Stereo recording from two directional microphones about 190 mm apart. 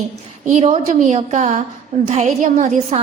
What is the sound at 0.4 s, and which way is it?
A woman's voice, 40° right (ahead or behind).